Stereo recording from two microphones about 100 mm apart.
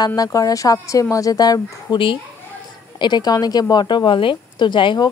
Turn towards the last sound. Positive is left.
turn(degrees=50)  # may be behind; listen again after turning